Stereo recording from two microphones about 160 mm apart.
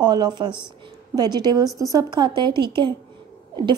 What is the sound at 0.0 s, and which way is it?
Speech, 25° right (ahead or behind).